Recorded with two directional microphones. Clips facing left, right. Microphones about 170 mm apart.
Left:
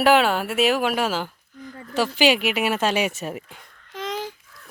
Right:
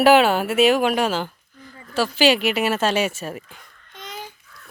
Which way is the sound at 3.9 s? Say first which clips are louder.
Left 7 dB; 90° left.